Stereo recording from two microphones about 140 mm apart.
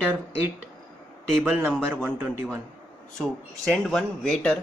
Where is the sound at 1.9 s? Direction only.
15° right (ahead or behind).